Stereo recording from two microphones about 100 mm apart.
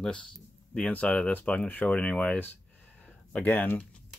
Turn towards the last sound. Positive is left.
turn(degrees=15)  # may be behind; listen again after turning